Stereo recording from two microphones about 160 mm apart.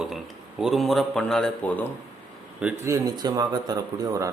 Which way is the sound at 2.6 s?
20° right (ahead or behind).